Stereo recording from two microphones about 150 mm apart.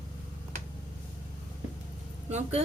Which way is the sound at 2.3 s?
50° right (ahead or behind).